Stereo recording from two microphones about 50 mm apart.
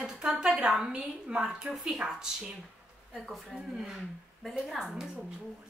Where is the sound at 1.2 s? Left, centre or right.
Centre.